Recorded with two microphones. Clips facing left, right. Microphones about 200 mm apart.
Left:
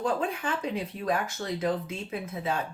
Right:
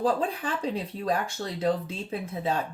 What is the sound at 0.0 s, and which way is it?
Speech, 35° right (ahead or behind).